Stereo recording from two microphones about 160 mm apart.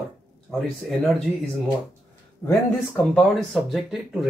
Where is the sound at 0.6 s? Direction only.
5° left (ahead or behind).